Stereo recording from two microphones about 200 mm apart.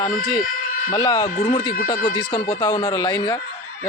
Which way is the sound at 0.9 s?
20° left (ahead or behind).